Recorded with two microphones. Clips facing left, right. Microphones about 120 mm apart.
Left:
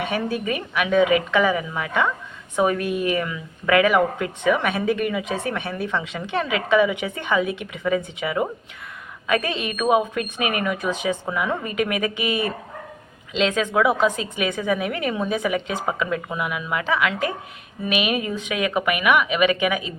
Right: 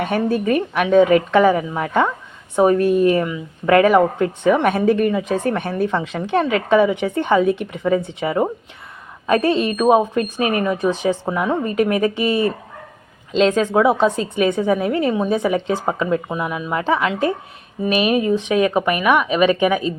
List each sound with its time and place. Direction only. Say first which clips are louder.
0.0 s a woman's voice: right 6 dB; 40° right (ahead or behind)